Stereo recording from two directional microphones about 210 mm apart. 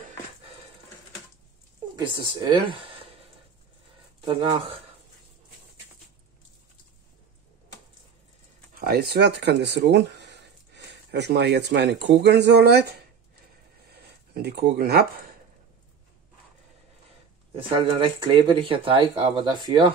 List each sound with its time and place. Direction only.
2.0 s speech: 20° right (ahead or behind)
4.2 s speech: 20° right (ahead or behind)
8.7 s speech: 50° right (ahead or behind)
13.8 s a sound: 50° right (ahead or behind)
17.7 s speech: 25° right (ahead or behind)